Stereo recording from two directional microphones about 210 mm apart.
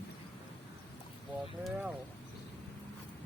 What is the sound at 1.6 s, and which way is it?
Speech, centre (ahead or behind).